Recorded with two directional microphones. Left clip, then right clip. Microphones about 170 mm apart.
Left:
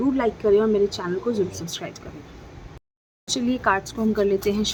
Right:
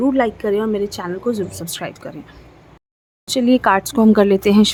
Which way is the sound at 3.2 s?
30° right (ahead or behind).